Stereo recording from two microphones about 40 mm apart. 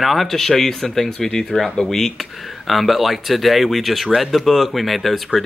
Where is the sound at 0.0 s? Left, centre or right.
Centre.